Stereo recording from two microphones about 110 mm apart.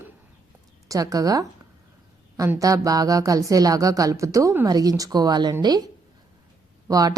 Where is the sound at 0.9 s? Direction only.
35° right (ahead or behind).